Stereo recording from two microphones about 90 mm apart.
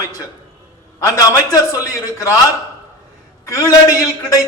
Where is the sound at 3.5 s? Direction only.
40° left (ahead or behind).